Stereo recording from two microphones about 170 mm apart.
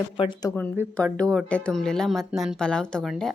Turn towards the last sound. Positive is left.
turn(degrees=0)  # may be behind; listen again after turning